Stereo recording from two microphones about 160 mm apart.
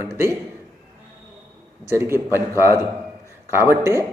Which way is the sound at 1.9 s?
15° right (ahead or behind).